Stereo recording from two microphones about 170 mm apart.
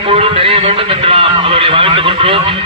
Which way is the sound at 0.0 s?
35° right (ahead or behind).